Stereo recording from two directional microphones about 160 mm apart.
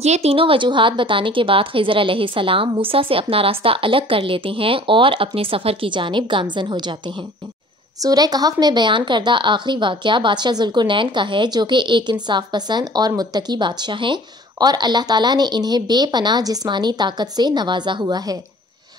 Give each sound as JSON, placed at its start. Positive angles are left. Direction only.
{"t": 0.0, "sound": "a woman's voice", "side_deg": -40}